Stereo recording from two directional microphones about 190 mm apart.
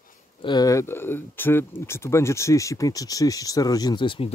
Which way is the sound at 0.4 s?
20° left (ahead or behind).